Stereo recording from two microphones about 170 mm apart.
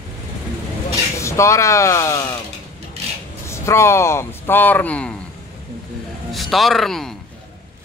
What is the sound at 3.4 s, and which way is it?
Speech, 15° left (ahead or behind).